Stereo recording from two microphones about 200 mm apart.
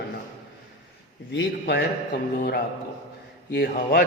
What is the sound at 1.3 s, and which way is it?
A man's voice, 60° left (ahead or behind).